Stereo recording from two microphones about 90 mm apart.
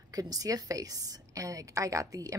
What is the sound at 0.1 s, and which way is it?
A woman's voice, 45° right (ahead or behind).